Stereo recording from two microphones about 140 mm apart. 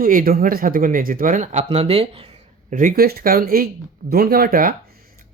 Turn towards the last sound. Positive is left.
turn(degrees=-90)